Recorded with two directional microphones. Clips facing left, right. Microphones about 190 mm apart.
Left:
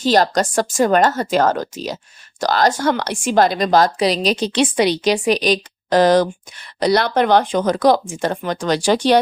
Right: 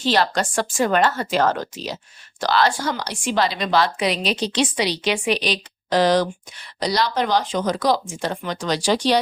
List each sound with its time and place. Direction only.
0.0 s a woman's voice: 40° left (ahead or behind)
5.1 s a woman's voice: 40° left (ahead or behind)